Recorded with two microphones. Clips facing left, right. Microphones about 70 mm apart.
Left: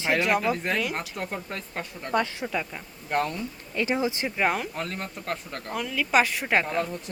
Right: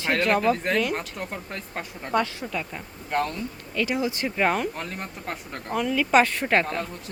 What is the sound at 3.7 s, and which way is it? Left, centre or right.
Speech, left.